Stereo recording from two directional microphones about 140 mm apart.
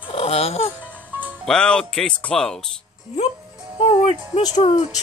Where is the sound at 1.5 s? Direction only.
5° left (ahead or behind).